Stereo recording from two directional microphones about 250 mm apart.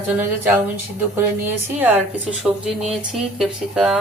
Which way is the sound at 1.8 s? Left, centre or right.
Centre.